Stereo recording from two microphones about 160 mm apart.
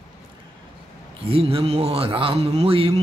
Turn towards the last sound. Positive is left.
turn(degrees=-35)  # may be behind; listen again after turning